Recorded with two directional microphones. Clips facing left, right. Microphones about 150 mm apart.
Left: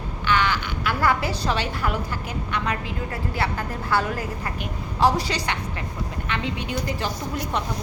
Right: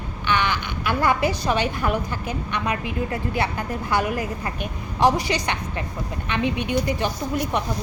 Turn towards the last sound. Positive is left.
turn(degrees=-15)  # may be behind; listen again after turning